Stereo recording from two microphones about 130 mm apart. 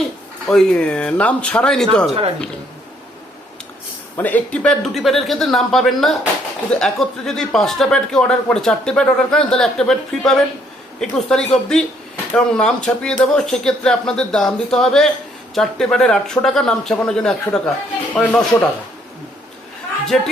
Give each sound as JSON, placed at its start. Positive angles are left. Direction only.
{"t": 0.4, "sound": "speech", "side_deg": 5}
{"t": 2.0, "sound": "speech", "side_deg": -50}
{"t": 4.2, "sound": "speech", "side_deg": 10}
{"t": 20.1, "sound": "speech", "side_deg": 0}